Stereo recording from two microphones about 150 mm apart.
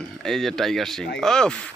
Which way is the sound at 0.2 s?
Centre (ahead or behind).